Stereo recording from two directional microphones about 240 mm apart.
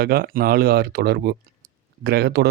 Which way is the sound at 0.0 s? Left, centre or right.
Right.